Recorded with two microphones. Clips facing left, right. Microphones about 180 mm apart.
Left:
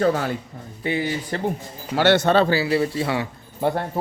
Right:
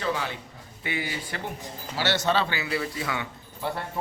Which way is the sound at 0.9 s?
35° left (ahead or behind).